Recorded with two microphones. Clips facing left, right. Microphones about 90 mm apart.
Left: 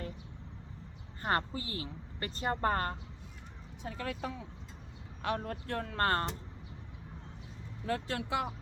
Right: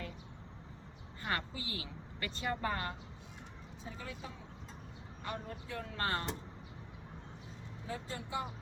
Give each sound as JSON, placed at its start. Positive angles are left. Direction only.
{"t": 1.2, "sound": "speech", "side_deg": 40}
{"t": 3.8, "sound": "speech", "side_deg": 75}
{"t": 7.9, "sound": "speech", "side_deg": 85}